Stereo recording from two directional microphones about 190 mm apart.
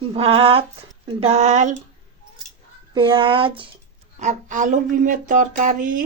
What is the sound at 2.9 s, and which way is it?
Speech, 25° right (ahead or behind).